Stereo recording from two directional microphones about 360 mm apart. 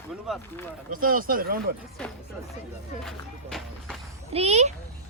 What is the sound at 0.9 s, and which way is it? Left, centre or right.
Speech, right.